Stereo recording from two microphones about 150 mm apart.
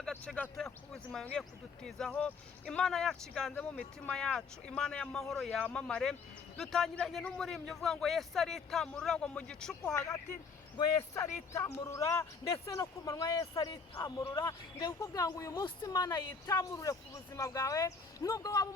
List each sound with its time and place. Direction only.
0.3 s a man's voice: centre (ahead or behind)
11.1 s speech: 15° left (ahead or behind)